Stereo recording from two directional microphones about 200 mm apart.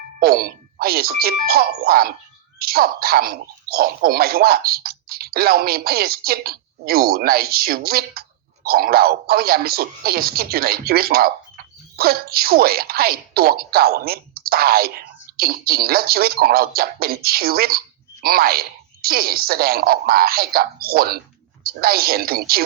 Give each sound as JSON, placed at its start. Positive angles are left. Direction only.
{"t": 0.2, "sound": "speech", "side_deg": -50}